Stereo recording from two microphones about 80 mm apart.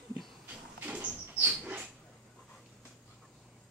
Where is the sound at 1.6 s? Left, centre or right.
Centre.